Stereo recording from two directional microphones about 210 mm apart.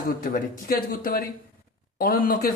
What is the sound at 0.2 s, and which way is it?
A man's voice, 45° left (ahead or behind).